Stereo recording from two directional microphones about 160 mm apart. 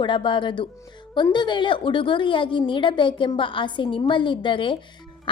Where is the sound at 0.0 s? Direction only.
30° left (ahead or behind).